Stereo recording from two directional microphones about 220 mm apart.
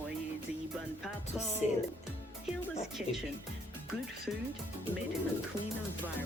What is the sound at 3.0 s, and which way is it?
Speech, 5° right (ahead or behind).